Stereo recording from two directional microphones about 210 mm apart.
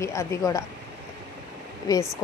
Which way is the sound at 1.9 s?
20° left (ahead or behind).